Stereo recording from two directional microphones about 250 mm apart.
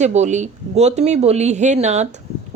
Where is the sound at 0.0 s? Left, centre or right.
Right.